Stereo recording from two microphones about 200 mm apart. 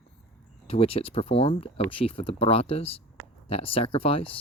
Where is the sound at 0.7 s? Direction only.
30° left (ahead or behind).